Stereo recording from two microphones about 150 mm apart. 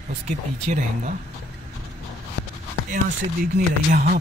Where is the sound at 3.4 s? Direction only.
75° right (ahead or behind).